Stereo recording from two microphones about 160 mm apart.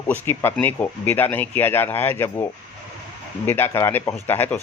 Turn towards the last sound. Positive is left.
turn(degrees=10)  # may be behind; listen again after turning